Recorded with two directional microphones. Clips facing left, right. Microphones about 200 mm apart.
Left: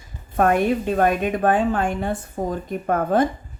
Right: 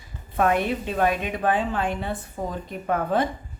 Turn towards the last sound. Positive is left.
turn(degrees=45)  # may be behind; listen again after turning